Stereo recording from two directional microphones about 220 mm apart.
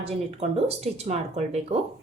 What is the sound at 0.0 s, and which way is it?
Speech, 25° right (ahead or behind).